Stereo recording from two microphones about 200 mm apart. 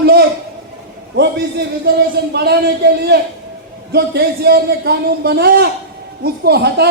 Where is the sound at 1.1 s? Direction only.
55° right (ahead or behind).